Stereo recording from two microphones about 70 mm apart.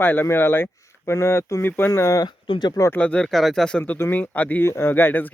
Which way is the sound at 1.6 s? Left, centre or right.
Left.